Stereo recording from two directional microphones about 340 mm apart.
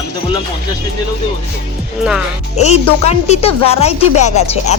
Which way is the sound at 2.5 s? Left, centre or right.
Centre.